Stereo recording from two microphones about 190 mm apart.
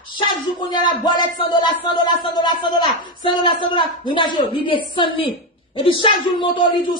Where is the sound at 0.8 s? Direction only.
25° left (ahead or behind).